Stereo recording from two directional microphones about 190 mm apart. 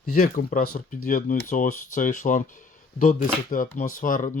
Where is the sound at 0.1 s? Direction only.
50° left (ahead or behind).